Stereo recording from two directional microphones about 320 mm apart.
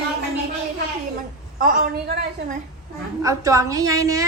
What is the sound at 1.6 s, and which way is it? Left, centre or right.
Speech, right.